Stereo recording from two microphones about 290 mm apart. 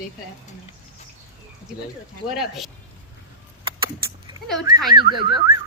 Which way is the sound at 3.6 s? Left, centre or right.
Centre.